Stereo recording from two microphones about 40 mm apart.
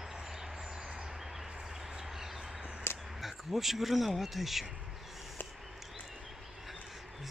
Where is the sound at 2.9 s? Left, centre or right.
Left.